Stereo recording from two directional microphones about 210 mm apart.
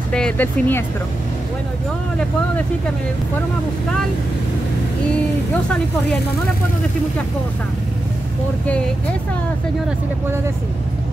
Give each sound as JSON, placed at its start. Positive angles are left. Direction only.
{"t": 0.1, "sound": "speech", "side_deg": 5}